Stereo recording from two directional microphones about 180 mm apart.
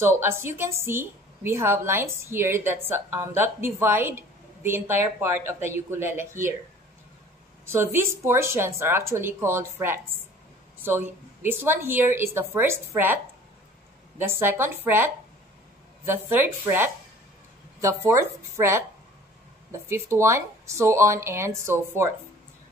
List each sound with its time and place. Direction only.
0.0 s a woman's voice: 15° right (ahead or behind)
7.6 s a woman's voice: 15° right (ahead or behind)
16.1 s a woman's voice: 10° right (ahead or behind)